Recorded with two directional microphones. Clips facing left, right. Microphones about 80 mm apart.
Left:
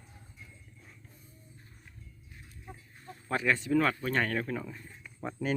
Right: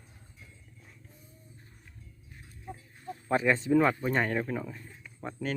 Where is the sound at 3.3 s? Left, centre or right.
Right.